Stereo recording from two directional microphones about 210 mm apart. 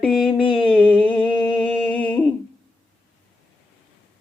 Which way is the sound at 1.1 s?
10° left (ahead or behind).